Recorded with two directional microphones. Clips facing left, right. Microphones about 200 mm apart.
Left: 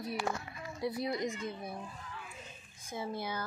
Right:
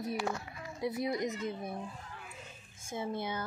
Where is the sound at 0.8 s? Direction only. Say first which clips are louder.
Right 1 dB; 20° right (ahead or behind).